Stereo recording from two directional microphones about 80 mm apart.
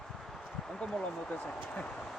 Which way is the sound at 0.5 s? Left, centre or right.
Centre.